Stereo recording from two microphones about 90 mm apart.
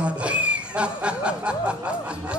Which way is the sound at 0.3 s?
15° right (ahead or behind).